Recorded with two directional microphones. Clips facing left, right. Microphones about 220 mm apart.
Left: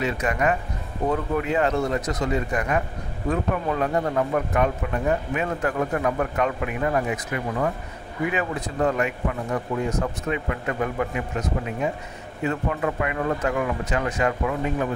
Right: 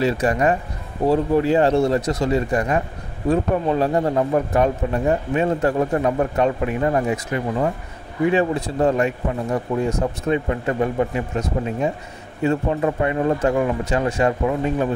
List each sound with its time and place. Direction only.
0.0 s speech: 30° right (ahead or behind)